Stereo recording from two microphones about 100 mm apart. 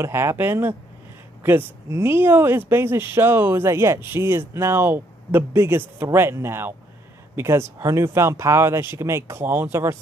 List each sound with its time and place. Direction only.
0.0 s speech: 25° right (ahead or behind)